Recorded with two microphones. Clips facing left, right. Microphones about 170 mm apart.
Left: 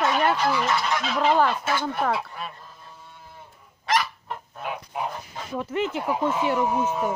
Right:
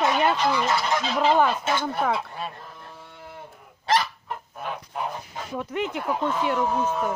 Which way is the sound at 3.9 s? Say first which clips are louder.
Right 1 dB; 30° right (ahead or behind).